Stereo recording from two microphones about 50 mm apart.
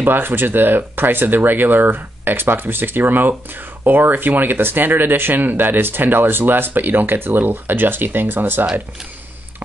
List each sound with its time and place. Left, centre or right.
0.0 s speech: right